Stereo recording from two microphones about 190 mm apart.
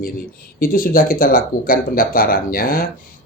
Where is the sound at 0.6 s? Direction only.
50° left (ahead or behind).